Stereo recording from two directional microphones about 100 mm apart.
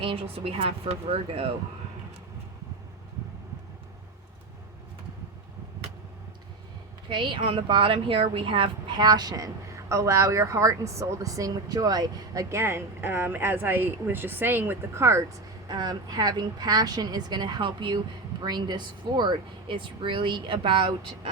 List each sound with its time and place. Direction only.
0.0 s speech: 65° right (ahead or behind)
7.1 s speech: 55° right (ahead or behind)